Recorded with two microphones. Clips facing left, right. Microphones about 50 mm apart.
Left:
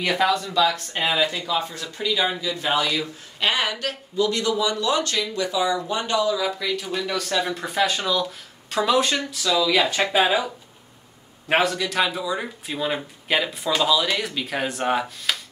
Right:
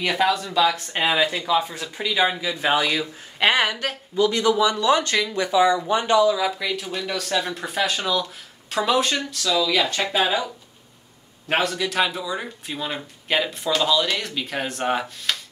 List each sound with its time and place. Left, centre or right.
0.0 s speech: centre; by 6.1 s right
6.1 s speech: centre